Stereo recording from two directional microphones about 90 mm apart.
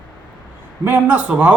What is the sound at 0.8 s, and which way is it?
Speech, 20° right (ahead or behind).